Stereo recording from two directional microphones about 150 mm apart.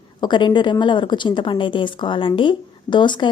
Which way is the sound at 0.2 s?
30° left (ahead or behind).